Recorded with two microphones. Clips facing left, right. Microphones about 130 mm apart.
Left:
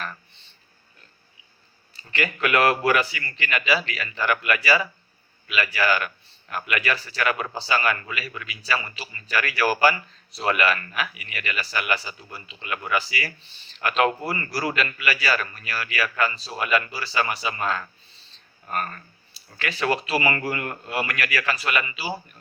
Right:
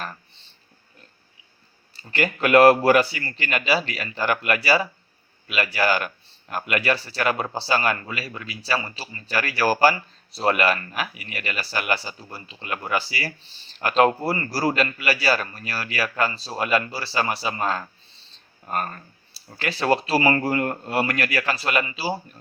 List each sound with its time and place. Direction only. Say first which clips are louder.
2.0 s speech: right 2 dB; 40° right (ahead or behind)